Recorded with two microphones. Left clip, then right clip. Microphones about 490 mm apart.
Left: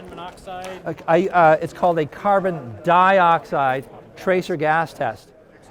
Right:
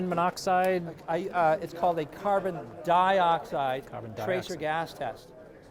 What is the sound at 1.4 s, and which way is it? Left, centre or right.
A man's voice, left.